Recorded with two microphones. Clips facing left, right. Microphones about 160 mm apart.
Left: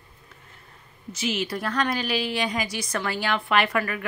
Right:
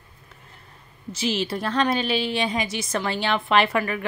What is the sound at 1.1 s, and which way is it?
A woman's voice, 30° right (ahead or behind).